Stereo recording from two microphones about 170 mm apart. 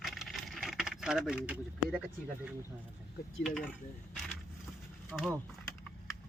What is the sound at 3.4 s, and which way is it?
Speech, 5° left (ahead or behind).